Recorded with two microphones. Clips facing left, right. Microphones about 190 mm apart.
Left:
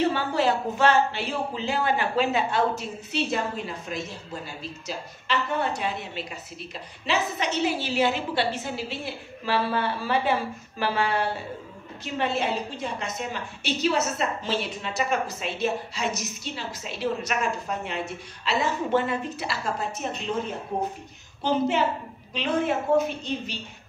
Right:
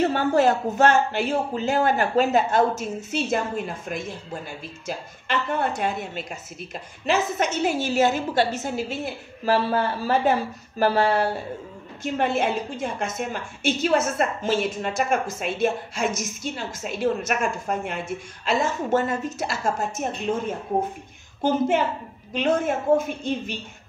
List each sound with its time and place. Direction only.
0.0 s a woman's voice: 45° right (ahead or behind)
21.4 s a woman's voice: 50° right (ahead or behind)